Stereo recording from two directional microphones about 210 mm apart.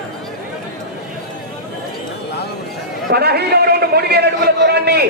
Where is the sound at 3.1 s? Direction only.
50° right (ahead or behind).